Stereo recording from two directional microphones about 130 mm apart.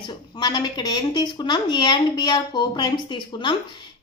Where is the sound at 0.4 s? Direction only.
35° left (ahead or behind).